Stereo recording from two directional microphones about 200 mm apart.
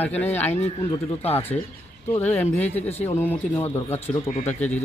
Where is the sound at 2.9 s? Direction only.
35° left (ahead or behind).